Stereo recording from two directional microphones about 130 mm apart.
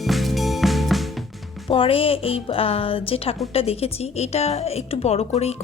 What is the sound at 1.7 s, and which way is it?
A woman's voice, 45° left (ahead or behind).